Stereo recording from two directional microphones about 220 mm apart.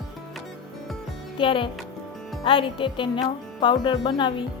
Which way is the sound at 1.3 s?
25° left (ahead or behind).